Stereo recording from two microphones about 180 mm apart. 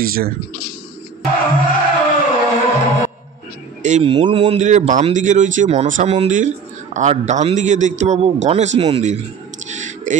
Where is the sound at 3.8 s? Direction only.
40° right (ahead or behind).